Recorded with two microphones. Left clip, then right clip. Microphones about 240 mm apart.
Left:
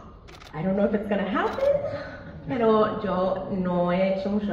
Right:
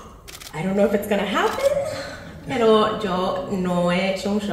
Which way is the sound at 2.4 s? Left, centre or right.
Right.